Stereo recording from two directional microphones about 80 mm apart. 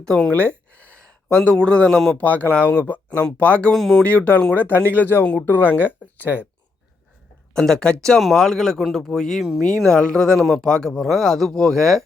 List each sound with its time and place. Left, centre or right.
0.1 s a sound: centre
1.6 s speech: centre
3.8 s speech: centre
4.0 s speech: centre
7.5 s speech: centre